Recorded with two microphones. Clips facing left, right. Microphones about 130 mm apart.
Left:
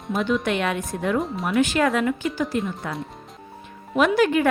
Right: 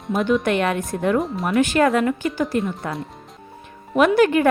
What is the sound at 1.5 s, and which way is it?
Speech, 50° right (ahead or behind).